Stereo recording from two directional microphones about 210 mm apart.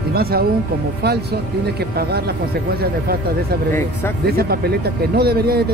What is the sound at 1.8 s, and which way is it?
Speech, 50° right (ahead or behind).